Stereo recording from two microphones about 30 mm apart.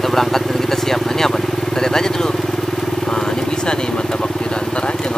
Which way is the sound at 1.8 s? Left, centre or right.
Centre.